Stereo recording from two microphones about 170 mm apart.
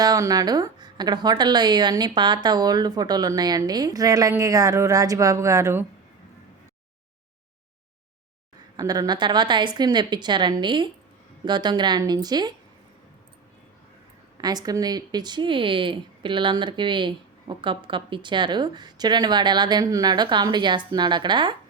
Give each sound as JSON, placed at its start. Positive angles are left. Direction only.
{"t": 0.0, "sound": "a woman's voice", "side_deg": -20}
{"t": 8.7, "sound": "a woman's voice", "side_deg": -20}
{"t": 14.4, "sound": "a woman's voice", "side_deg": -25}